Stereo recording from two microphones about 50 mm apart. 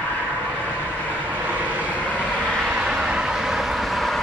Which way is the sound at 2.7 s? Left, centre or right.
Centre.